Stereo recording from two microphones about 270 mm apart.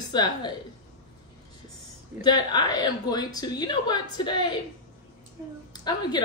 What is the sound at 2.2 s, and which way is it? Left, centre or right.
A woman's voice, centre.